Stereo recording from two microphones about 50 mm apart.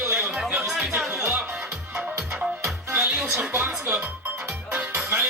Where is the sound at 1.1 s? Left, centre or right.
Right.